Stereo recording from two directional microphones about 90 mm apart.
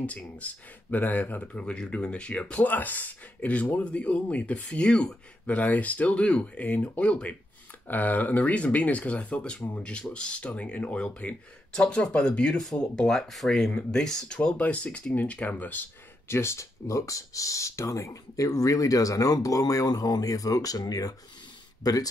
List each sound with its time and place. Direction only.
0.0 s speech: 15° left (ahead or behind); by 22.0 s 45° left (ahead or behind)